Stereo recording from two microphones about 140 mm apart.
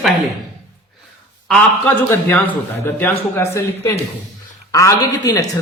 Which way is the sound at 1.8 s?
15° left (ahead or behind).